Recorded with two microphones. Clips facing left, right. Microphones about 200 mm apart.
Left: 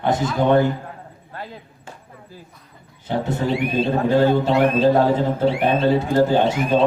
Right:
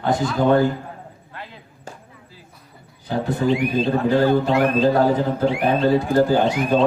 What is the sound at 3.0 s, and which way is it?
Speech, 25° left (ahead or behind).